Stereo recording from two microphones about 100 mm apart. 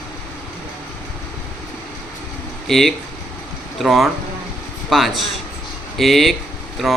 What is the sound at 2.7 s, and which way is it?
A man's voice, 5° left (ahead or behind).